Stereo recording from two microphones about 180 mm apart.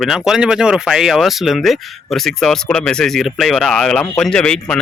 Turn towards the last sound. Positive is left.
turn(degrees=5)  # may be behind; listen again after turning